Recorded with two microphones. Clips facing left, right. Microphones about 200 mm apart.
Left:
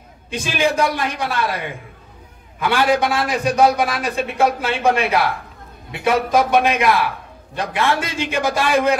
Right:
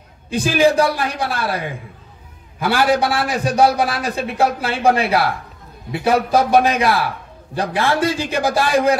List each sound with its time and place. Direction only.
0.3 s a man's voice: 35° right (ahead or behind)
2.6 s a man's voice: 35° right (ahead or behind)